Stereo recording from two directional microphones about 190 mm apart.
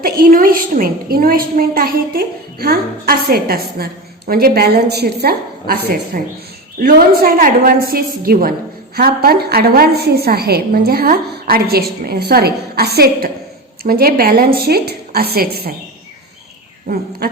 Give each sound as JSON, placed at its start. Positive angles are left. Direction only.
{"t": 0.0, "sound": "a woman's voice", "side_deg": -50}
{"t": 16.9, "sound": "a woman's voice", "side_deg": -50}